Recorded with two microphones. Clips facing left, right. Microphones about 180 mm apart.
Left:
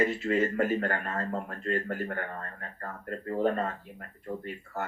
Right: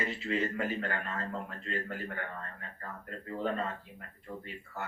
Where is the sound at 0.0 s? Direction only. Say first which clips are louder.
Left 7 dB; 50° left (ahead or behind).